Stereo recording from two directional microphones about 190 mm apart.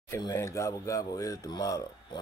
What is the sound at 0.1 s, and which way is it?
Speech, 15° left (ahead or behind).